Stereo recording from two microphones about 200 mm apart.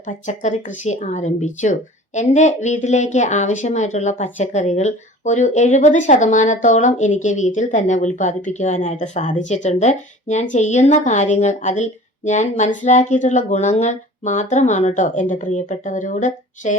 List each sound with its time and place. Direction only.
0.0 s speech: 35° left (ahead or behind)